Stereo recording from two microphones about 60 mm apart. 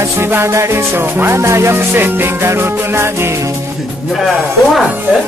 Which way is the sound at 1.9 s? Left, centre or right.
Right.